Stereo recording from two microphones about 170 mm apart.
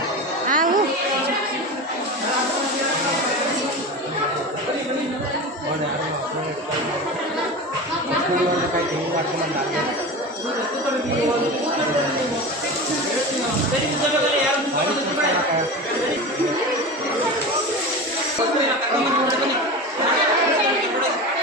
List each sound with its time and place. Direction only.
0.4 s music: 50° right (ahead or behind)